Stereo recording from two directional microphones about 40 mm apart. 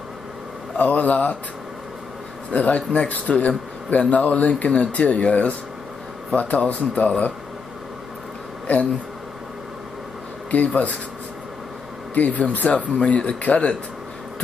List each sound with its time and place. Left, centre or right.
0.7 s a man's voice: left
2.5 s a man's voice: left
10.5 s a man's voice: left
12.1 s a man's voice: left